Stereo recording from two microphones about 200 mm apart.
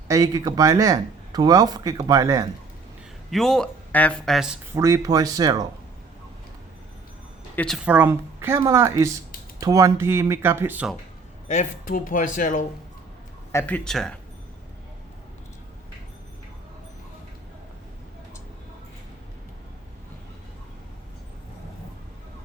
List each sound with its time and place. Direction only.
0.1 s speech: 15° right (ahead or behind)
3.2 s speech: centre (ahead or behind)
4.7 s speech: 15° right (ahead or behind)
7.5 s speech: 5° left (ahead or behind)
7.9 s speech: 10° right (ahead or behind)
11.4 s speech: 40° left (ahead or behind)
13.5 s speech: 10° left (ahead or behind)